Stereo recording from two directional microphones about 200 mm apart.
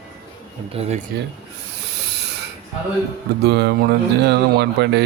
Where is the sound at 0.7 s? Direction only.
30° right (ahead or behind).